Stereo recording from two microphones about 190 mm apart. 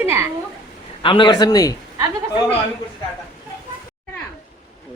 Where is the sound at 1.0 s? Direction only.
25° left (ahead or behind).